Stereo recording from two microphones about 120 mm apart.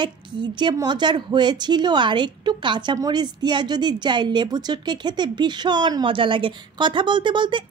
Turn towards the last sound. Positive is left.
turn(degrees=-40)  # may be behind; listen again after turning